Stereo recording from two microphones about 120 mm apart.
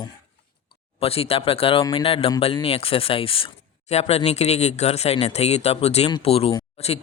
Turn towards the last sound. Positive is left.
turn(degrees=60)  # may be behind; listen again after turning